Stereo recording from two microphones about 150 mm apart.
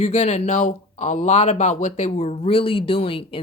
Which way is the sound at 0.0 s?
50° left (ahead or behind).